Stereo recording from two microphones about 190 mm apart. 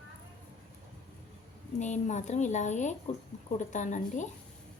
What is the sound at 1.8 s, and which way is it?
A woman's voice, 40° left (ahead or behind).